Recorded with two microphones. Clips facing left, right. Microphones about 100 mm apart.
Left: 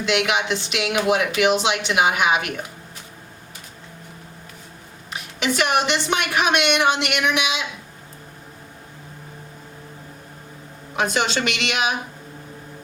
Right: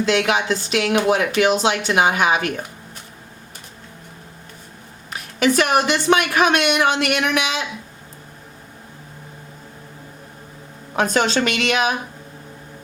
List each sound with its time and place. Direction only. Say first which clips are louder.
0.0 s speech: right 3 dB; 35° right (ahead or behind)
5.5 s speech: right 3 dB; 40° right (ahead or behind)
11.0 s speech: right 3 dB; 40° right (ahead or behind)